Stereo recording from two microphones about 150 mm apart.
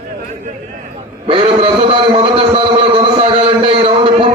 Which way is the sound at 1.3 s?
40° right (ahead or behind).